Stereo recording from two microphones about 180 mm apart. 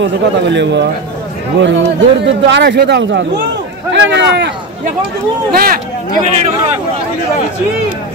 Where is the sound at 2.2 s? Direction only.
75° right (ahead or behind).